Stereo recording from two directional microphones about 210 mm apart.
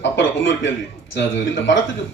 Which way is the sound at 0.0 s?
60° left (ahead or behind).